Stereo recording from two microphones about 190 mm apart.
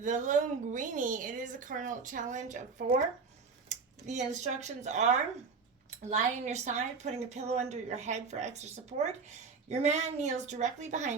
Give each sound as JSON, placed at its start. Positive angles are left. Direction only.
{"t": 0.0, "sound": "a woman's voice", "side_deg": -40}
{"t": 4.0, "sound": "a woman's voice", "side_deg": -40}